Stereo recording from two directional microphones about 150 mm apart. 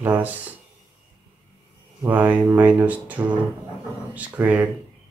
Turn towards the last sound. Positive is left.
turn(degrees=-10)  # may be behind; listen again after turning